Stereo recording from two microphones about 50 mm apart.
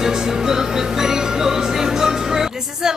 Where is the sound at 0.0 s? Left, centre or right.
Centre.